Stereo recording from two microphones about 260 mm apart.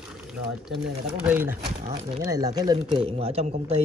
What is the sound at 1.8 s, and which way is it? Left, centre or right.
Speech, right.